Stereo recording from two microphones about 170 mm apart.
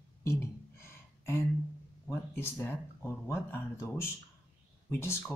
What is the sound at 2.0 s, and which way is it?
Speech, 15° left (ahead or behind).